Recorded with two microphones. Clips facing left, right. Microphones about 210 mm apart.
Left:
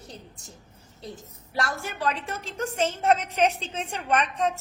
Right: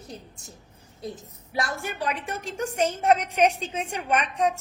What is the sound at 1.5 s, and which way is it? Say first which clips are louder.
A woman's voice: right 1 dB; 15° right (ahead or behind).